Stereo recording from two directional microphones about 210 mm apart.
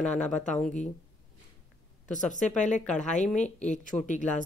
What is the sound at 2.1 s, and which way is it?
Speech, 35° left (ahead or behind).